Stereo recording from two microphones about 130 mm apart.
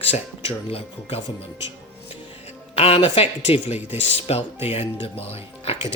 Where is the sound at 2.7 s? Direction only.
50° left (ahead or behind).